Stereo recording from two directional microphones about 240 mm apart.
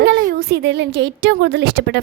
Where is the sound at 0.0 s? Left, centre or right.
Right.